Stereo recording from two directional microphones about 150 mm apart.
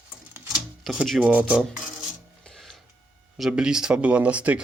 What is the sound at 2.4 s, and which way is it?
Music, 5° left (ahead or behind).